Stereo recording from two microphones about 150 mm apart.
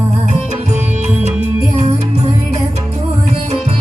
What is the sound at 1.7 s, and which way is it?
Music, 45° right (ahead or behind).